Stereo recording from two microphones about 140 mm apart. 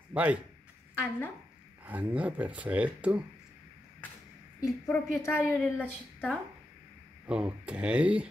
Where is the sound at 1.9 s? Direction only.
10° right (ahead or behind).